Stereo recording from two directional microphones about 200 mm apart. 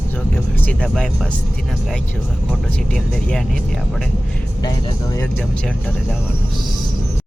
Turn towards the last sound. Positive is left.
turn(degrees=5)  # may be behind; listen again after turning